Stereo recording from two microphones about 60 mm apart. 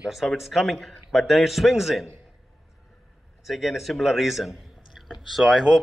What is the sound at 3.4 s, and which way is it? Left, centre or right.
A man's voice, centre.